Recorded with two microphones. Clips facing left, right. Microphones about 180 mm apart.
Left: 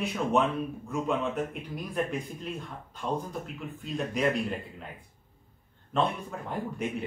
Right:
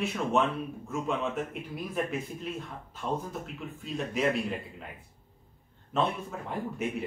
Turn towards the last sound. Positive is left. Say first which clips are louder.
# even
turn(degrees=0)  # may be behind; listen again after turning